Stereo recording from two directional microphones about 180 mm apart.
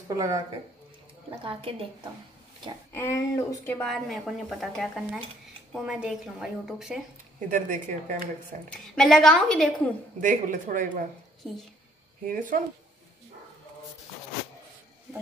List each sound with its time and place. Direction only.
0.1 s a woman's voice: 20° right (ahead or behind)
1.4 s a woman's voice: 30° right (ahead or behind)
2.9 s speech: 15° left (ahead or behind)
3.8 s speech: centre (ahead or behind)
7.3 s a woman's voice: 45° right (ahead or behind)
8.9 s speech: centre (ahead or behind)
10.2 s a woman's voice: 45° right (ahead or behind)
12.3 s a woman's voice: 50° right (ahead or behind)